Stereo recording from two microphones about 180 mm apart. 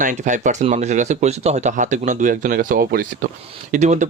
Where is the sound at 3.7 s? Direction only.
40° right (ahead or behind).